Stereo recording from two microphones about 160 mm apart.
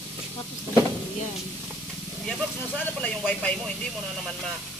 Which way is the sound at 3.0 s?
10° left (ahead or behind).